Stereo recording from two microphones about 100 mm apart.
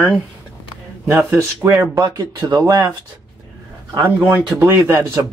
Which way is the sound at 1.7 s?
35° right (ahead or behind).